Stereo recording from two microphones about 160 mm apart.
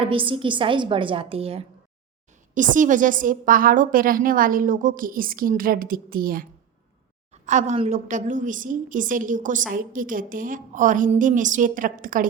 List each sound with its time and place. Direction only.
0.0 s a woman's voice: 35° right (ahead or behind)
2.6 s a woman's voice: 55° right (ahead or behind)
7.4 s a woman's voice: 50° right (ahead or behind)